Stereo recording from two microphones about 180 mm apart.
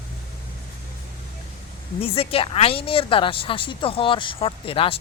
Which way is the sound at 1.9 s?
30° left (ahead or behind).